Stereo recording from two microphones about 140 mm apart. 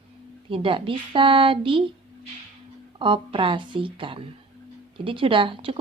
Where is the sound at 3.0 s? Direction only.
40° right (ahead or behind).